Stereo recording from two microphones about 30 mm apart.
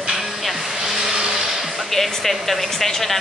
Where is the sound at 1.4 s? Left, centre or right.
Centre.